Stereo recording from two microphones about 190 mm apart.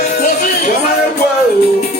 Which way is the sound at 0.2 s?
40° left (ahead or behind).